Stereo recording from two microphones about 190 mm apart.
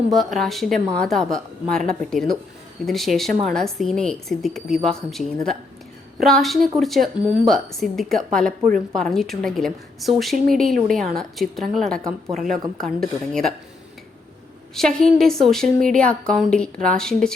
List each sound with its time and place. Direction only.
0.1 s a woman's voice: centre (ahead or behind)
10.3 s speech: 45° right (ahead or behind)
10.6 s a woman's voice: centre (ahead or behind)
14.8 s a woman's voice: centre (ahead or behind)